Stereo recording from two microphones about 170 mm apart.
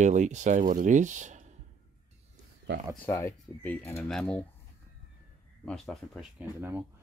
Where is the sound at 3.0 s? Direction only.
15° left (ahead or behind).